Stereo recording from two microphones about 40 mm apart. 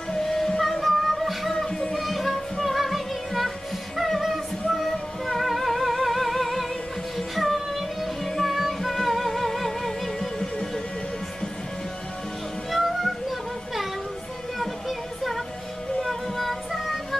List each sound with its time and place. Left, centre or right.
0.1 s music: centre
1.7 s music: centre
2.0 s music: centre
12.7 s music: centre
14.6 s music: centre